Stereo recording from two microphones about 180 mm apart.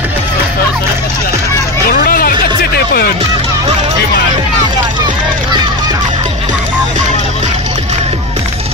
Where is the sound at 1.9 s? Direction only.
55° left (ahead or behind).